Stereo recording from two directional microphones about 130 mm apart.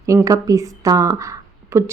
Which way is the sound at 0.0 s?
25° right (ahead or behind).